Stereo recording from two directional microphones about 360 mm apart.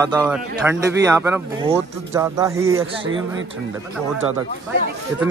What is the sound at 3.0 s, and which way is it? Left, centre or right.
Speech, right.